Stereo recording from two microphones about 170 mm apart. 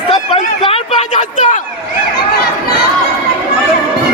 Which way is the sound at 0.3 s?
30° left (ahead or behind).